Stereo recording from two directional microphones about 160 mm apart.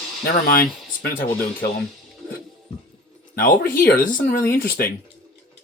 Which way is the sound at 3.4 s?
60° left (ahead or behind).